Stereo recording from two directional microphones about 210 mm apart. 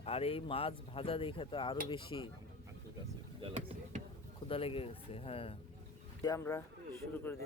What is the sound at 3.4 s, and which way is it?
Basketball bounce, 30° right (ahead or behind).